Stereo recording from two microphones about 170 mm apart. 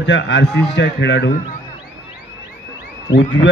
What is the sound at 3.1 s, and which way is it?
Speech, 90° left.